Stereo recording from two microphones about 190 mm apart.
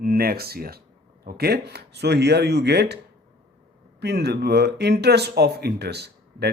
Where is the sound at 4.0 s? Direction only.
60° right (ahead or behind).